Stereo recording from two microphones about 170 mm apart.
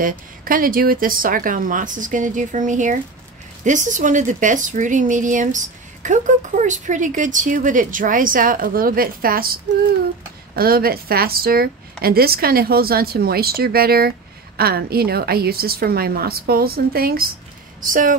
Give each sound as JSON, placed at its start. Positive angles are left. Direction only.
{"t": 0.0, "sound": "a woman's voice", "side_deg": -55}
{"t": 10.5, "sound": "a woman's voice", "side_deg": -60}
{"t": 17.7, "sound": "speech", "side_deg": -50}